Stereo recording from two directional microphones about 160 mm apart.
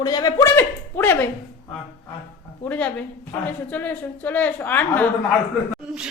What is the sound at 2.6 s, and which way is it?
A woman's voice, 10° left (ahead or behind).